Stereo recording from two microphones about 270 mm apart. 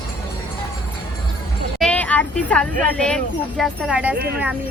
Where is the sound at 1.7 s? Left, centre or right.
Centre.